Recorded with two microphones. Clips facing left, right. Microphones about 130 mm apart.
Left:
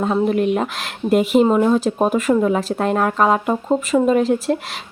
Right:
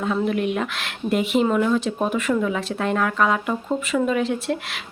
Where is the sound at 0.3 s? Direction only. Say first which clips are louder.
Left 5 dB; 40° left (ahead or behind).